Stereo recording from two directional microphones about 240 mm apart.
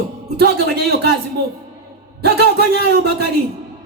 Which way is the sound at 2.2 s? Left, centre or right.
Right.